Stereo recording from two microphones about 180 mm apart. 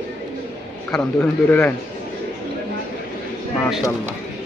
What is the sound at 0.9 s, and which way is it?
Speech, 5° left (ahead or behind).